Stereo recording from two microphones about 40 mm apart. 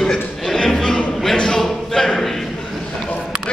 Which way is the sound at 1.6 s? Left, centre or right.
Centre.